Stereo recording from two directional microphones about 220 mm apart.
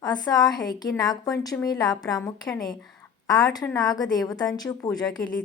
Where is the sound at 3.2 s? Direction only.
15° left (ahead or behind).